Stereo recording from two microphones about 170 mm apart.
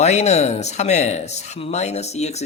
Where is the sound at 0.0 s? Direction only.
40° left (ahead or behind).